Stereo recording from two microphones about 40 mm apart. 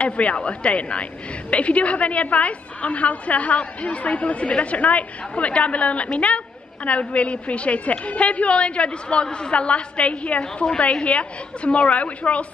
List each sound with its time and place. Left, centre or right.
0.0 s a woman's voice: left